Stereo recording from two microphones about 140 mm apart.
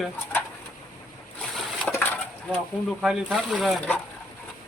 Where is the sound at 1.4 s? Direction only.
5° left (ahead or behind).